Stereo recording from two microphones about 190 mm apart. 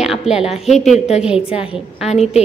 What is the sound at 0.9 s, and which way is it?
Speech, 35° left (ahead or behind).